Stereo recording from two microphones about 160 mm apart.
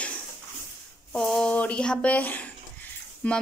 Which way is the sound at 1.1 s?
5° left (ahead or behind).